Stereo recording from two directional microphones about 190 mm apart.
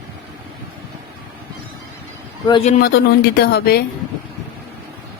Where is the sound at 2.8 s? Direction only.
60° left (ahead or behind).